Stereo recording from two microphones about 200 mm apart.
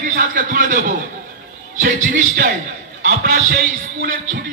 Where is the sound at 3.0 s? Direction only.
45° right (ahead or behind).